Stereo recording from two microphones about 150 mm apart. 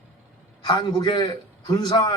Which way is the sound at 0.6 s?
30° left (ahead or behind).